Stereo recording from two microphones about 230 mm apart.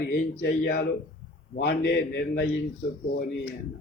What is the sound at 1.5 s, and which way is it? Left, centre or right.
Speech, left.